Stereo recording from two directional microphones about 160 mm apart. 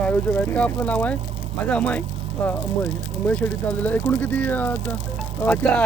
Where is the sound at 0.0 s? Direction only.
10° left (ahead or behind).